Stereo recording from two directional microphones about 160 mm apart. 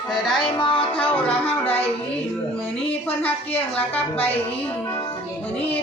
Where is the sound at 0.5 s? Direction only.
30° left (ahead or behind).